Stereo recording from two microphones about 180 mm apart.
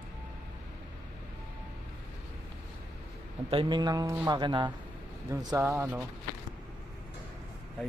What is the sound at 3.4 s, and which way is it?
Speech, 25° right (ahead or behind).